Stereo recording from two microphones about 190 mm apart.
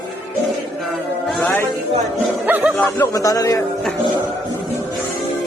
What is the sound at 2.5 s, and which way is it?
Speech, 10° right (ahead or behind).